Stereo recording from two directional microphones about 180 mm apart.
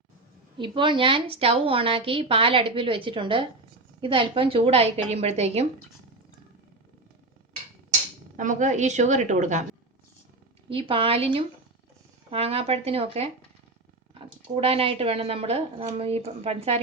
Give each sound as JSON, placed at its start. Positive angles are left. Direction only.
{"t": 0.6, "sound": "a woman's voice", "side_deg": -25}
{"t": 8.4, "sound": "a woman's voice", "side_deg": -45}
{"t": 10.7, "sound": "speech", "side_deg": -30}